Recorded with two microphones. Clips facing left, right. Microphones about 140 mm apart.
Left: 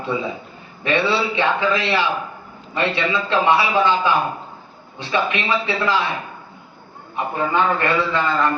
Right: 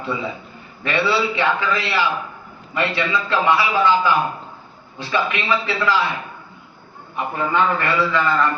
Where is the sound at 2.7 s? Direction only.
20° left (ahead or behind).